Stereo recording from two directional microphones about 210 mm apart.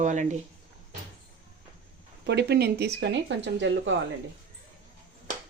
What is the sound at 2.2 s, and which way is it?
Speech, 50° right (ahead or behind).